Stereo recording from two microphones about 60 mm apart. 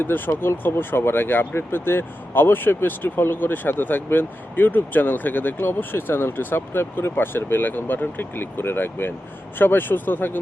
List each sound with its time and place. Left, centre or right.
0.0 s speech: left